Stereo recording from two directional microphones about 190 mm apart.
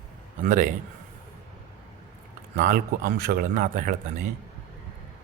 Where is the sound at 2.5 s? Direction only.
50° right (ahead or behind).